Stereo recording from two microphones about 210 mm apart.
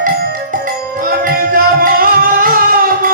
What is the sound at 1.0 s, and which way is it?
Music, 40° right (ahead or behind).